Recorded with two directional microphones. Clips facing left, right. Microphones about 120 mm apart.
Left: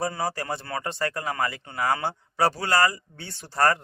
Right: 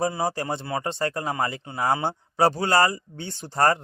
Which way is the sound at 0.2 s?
25° right (ahead or behind).